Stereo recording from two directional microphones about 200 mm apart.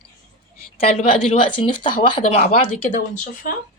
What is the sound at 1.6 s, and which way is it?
Speech, 25° left (ahead or behind).